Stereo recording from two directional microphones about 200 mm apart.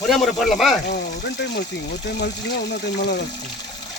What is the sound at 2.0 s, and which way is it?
Speech, 55° left (ahead or behind).